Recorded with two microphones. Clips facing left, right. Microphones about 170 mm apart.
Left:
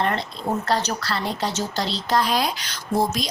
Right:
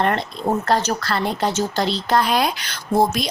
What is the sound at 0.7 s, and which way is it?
Speech, 50° right (ahead or behind).